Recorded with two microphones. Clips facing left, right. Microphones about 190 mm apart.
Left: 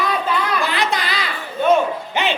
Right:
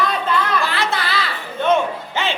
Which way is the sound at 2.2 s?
15° left (ahead or behind).